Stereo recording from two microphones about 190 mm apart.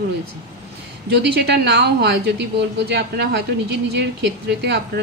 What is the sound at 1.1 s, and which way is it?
Speech, 60° right (ahead or behind).